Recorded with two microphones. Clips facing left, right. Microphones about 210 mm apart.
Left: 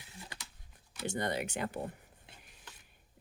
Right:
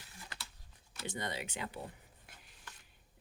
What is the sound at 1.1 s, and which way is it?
Speech, 50° left (ahead or behind).